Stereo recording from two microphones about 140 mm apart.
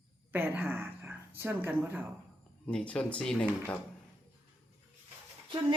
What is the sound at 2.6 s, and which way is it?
Speech, 10° left (ahead or behind).